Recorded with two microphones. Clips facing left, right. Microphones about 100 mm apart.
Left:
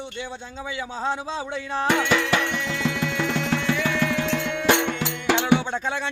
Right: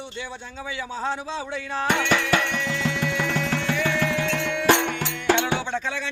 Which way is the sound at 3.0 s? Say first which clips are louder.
Even; 20° left (ahead or behind).